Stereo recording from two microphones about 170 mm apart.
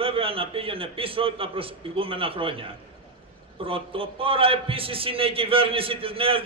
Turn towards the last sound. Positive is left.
turn(degrees=-35)  # may be behind; listen again after turning